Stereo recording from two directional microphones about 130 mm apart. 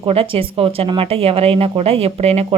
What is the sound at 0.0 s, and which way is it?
Speech, 45° right (ahead or behind).